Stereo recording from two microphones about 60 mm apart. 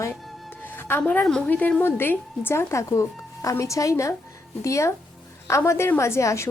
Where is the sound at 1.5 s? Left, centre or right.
Left.